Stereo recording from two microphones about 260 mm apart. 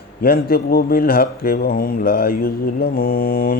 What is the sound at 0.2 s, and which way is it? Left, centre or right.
Mantra, left.